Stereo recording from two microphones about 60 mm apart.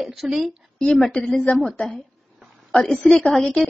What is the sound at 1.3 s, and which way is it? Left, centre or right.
Speech, centre.